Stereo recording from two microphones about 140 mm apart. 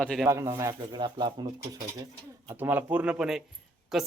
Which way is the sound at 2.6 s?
15° right (ahead or behind).